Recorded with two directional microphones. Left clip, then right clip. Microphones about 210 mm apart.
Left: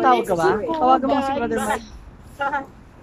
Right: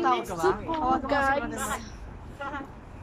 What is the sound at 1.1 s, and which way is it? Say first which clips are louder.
Speech: left 4 dB; 10° left (ahead or behind).